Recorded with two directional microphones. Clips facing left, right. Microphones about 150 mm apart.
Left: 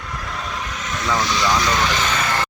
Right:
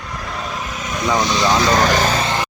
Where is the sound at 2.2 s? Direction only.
20° right (ahead or behind).